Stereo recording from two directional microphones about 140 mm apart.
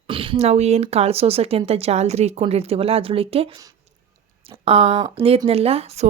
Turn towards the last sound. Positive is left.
turn(degrees=-50)  # may be behind; listen again after turning